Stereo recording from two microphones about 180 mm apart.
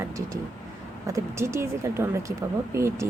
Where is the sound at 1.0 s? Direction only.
15° right (ahead or behind).